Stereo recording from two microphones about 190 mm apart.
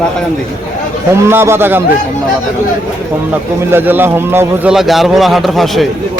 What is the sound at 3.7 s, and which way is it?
A man's voice, 10° right (ahead or behind).